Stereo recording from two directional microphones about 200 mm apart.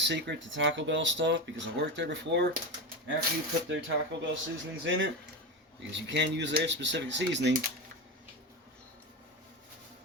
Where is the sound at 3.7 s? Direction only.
75° right (ahead or behind).